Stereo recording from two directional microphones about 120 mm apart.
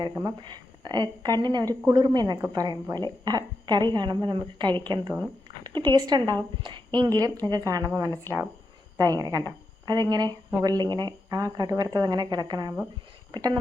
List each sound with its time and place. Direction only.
0.3 s a woman's voice: 35° right (ahead or behind)